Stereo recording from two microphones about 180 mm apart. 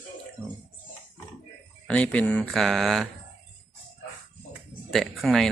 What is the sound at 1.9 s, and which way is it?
Speech, 5° left (ahead or behind).